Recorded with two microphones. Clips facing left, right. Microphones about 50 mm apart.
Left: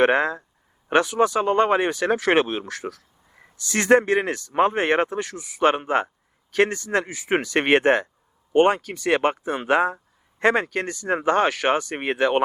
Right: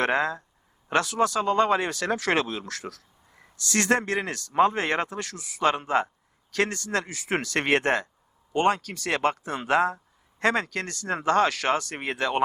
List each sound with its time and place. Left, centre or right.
0.0 s speech: left
5.6 s speech: left